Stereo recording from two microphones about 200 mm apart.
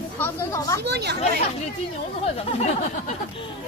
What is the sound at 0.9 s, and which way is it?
Speech, 55° right (ahead or behind).